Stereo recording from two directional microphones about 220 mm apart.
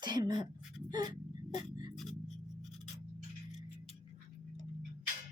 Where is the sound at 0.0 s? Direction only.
20° right (ahead or behind).